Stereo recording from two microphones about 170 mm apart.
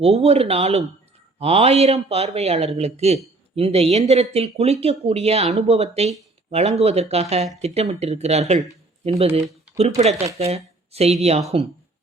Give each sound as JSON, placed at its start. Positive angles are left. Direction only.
{"t": 0.0, "sound": "speech", "side_deg": -35}